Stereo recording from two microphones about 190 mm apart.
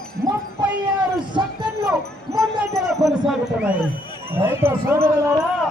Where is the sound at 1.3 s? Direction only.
25° right (ahead or behind).